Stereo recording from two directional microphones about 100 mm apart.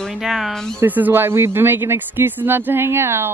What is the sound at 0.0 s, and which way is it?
Speech, centre (ahead or behind).